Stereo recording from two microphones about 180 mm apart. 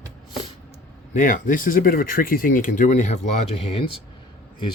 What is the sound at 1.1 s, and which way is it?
Speech, 45° left (ahead or behind).